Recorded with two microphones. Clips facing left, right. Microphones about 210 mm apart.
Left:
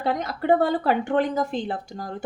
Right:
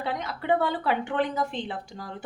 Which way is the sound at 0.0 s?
45° left (ahead or behind).